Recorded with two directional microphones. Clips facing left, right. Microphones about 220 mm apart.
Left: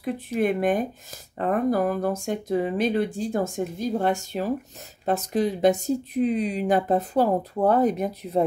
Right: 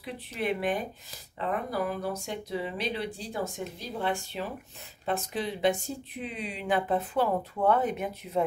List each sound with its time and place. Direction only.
0.0 s speech: 50° left (ahead or behind)